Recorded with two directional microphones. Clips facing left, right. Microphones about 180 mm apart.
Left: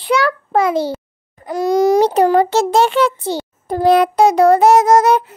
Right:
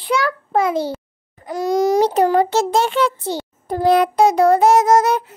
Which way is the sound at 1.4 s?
65° left (ahead or behind).